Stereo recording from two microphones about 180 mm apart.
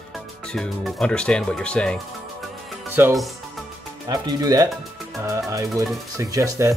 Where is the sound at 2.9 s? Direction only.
10° right (ahead or behind).